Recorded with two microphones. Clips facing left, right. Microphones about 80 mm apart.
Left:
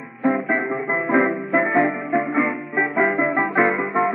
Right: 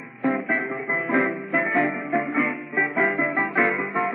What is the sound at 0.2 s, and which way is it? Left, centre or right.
Music, centre.